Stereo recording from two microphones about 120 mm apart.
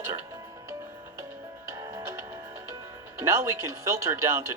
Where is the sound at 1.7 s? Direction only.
30° right (ahead or behind).